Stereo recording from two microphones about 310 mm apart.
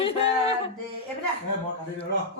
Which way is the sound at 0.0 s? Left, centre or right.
Centre.